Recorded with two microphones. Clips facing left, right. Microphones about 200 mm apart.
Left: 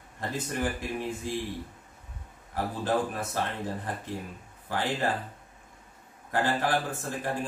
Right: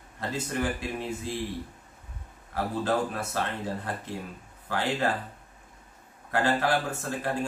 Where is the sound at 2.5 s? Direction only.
15° left (ahead or behind).